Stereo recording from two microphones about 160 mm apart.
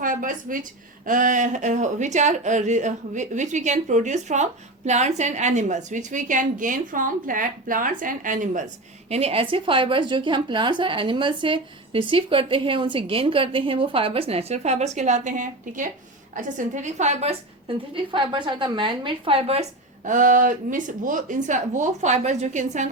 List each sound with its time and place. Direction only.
0.0 s a woman's voice: 55° right (ahead or behind)
9.0 s a woman's voice: 40° right (ahead or behind)
20.1 s a woman's voice: 55° right (ahead or behind)